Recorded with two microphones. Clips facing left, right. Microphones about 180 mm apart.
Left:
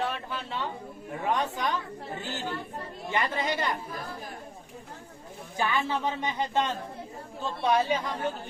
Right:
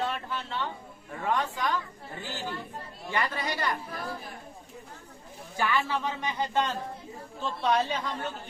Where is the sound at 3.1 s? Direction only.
20° left (ahead or behind).